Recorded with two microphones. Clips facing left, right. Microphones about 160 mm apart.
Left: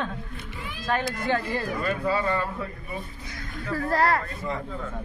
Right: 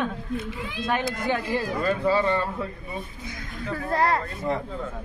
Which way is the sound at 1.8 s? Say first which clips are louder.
Right 5 dB; 30° right (ahead or behind).